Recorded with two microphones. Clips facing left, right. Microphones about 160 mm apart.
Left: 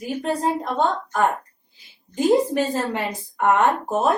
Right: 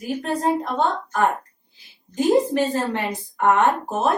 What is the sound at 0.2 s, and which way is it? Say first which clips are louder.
Speech: even; 10° left (ahead or behind).